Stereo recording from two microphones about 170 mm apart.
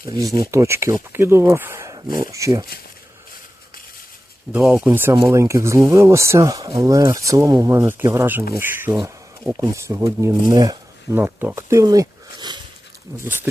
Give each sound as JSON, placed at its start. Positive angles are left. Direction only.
{"t": 0.3, "sound": "speech", "side_deg": -15}
{"t": 4.6, "sound": "speech", "side_deg": 0}
{"t": 4.9, "sound": "speech", "side_deg": -15}
{"t": 13.1, "sound": "speech", "side_deg": -10}